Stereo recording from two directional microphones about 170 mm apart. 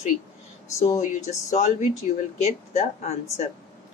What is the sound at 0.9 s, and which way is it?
Speech, 45° left (ahead or behind).